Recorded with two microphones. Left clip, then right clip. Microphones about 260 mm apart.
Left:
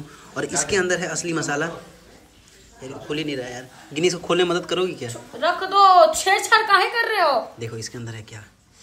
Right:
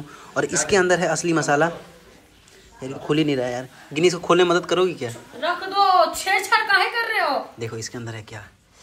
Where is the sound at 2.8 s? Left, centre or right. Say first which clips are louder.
Right 6 dB; centre.